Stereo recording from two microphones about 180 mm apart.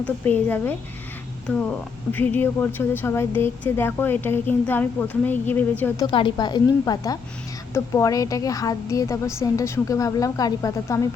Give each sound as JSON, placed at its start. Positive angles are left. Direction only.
{"t": 0.0, "sound": "a woman's voice", "side_deg": 10}
{"t": 6.1, "sound": "a woman's voice", "side_deg": 30}